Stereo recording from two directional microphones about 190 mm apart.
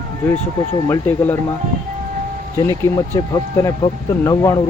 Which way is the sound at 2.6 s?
15° left (ahead or behind).